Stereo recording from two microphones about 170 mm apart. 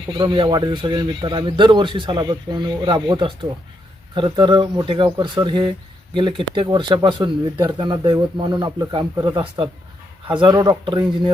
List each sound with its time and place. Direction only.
0.2 s speech: 25° right (ahead or behind)